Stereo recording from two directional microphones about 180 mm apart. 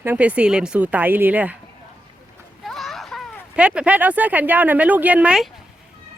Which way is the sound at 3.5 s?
5° right (ahead or behind).